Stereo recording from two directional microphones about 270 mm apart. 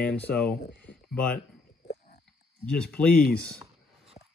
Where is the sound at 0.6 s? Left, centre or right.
Left.